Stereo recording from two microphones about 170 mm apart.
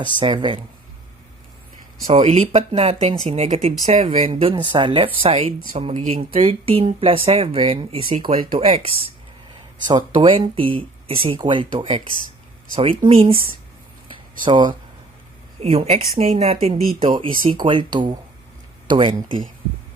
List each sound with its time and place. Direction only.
0.2 s speech: 30° right (ahead or behind)
2.0 s speech: 45° right (ahead or behind)
6.3 s speech: 35° right (ahead or behind)
9.8 s speech: 25° right (ahead or behind)
14.4 s speech: 25° right (ahead or behind)